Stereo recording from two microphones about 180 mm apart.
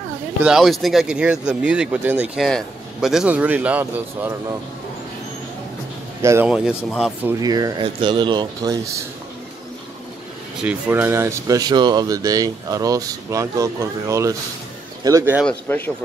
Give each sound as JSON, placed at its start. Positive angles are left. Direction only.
{"t": 0.4, "sound": "speech", "side_deg": 0}
{"t": 6.2, "sound": "speech", "side_deg": -10}
{"t": 7.2, "sound": "speech", "side_deg": -20}
{"t": 10.6, "sound": "speech", "side_deg": -10}
{"t": 15.4, "sound": "speech", "side_deg": 10}